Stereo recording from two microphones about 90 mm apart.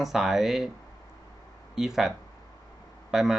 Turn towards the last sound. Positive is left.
turn(degrees=-5)  # may be behind; listen again after turning